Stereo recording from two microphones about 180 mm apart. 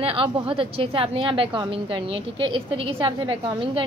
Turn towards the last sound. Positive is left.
turn(degrees=-30)  # may be behind; listen again after turning